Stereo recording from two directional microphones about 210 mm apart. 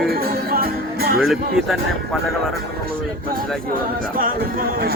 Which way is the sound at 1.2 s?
Centre (ahead or behind).